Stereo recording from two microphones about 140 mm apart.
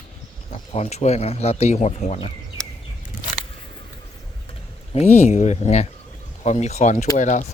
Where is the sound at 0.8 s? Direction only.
50° left (ahead or behind).